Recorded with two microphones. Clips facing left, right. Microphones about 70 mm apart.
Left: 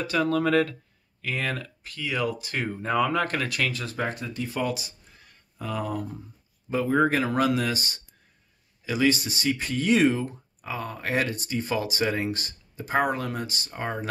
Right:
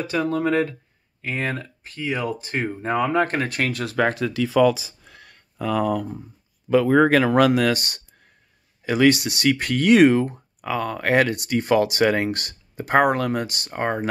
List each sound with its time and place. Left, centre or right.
0.0 s speech: right
3.8 s speech: right
5.0 s a sound: right
6.7 s speech: right